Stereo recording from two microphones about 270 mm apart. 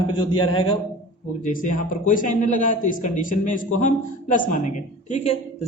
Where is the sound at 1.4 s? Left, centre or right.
Left.